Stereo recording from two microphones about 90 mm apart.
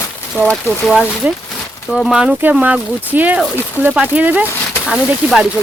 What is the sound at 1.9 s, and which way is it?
Speech, centre (ahead or behind).